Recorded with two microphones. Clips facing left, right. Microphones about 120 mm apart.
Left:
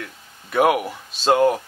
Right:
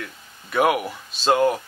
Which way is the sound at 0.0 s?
45° left (ahead or behind).